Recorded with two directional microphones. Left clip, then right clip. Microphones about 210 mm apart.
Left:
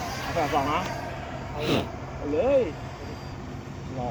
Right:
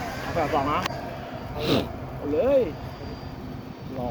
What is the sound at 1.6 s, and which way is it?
Speech, 5° right (ahead or behind).